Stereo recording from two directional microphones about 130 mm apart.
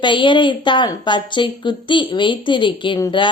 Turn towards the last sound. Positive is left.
turn(degrees=35)  # may be behind; listen again after turning